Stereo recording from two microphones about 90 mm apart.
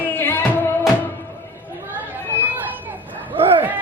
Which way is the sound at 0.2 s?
25° left (ahead or behind).